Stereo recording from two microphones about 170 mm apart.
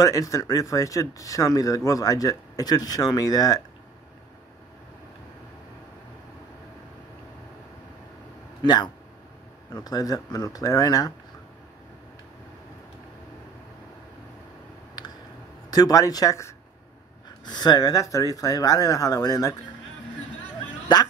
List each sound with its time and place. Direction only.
0.0 s speech: 20° left (ahead or behind)
8.6 s speech: 25° left (ahead or behind)
15.7 s speech: 20° left (ahead or behind)